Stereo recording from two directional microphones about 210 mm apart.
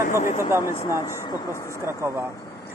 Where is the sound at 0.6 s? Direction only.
15° left (ahead or behind).